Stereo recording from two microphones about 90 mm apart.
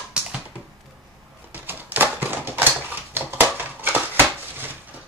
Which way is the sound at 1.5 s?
20° right (ahead or behind).